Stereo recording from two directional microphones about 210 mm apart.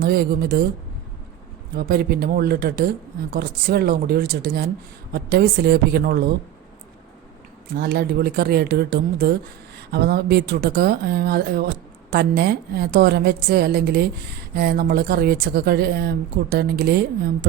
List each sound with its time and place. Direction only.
0.0 s speech: 45° right (ahead or behind)
1.7 s speech: 50° right (ahead or behind)
7.8 s speech: 50° right (ahead or behind)